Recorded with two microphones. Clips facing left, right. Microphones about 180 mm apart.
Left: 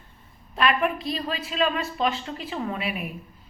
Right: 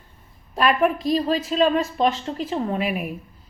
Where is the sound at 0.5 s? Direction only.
40° right (ahead or behind).